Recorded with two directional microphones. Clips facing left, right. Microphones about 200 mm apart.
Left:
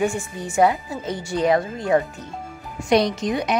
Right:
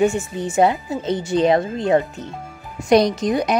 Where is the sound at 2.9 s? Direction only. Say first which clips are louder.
Right 4 dB; 40° right (ahead or behind).